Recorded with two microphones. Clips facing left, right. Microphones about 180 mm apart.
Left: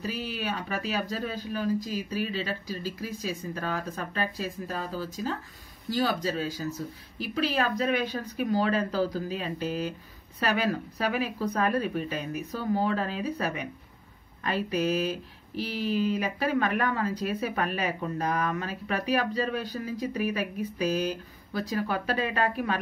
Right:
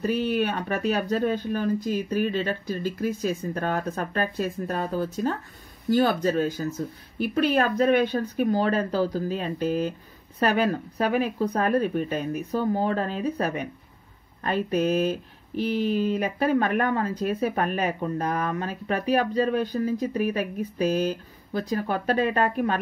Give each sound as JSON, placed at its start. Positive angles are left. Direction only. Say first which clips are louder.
{"t": 0.3, "sound": "speech", "louder": "right 7 dB", "side_deg": -55}